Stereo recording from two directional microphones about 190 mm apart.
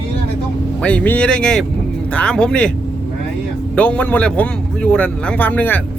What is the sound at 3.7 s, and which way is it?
A man's voice, 5° left (ahead or behind).